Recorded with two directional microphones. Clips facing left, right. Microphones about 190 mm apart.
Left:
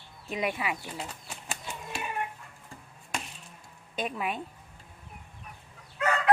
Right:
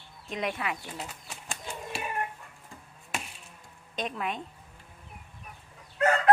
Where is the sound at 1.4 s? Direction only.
Centre (ahead or behind).